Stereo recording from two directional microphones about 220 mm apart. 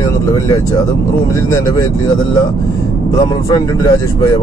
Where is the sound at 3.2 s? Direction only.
15° left (ahead or behind).